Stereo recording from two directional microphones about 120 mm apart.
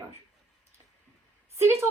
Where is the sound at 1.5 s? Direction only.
20° right (ahead or behind).